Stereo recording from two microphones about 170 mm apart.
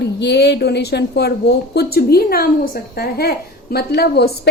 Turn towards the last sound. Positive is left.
turn(degrees=70)  # may be behind; listen again after turning